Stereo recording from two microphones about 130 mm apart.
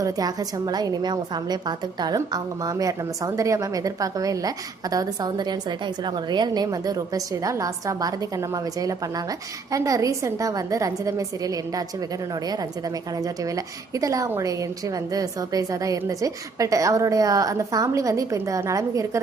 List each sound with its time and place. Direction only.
0.0 s a woman's voice: 30° right (ahead or behind)
13.9 s a woman's voice: 25° right (ahead or behind)